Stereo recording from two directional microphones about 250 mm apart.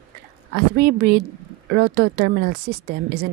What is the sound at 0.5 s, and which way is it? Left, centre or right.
Speech, right.